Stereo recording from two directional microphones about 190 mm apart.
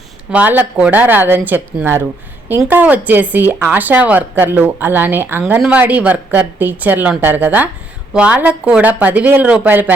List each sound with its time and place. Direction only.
0.3 s speech: 10° right (ahead or behind)